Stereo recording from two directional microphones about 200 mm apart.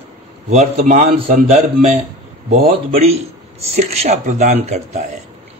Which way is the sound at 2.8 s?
30° right (ahead or behind).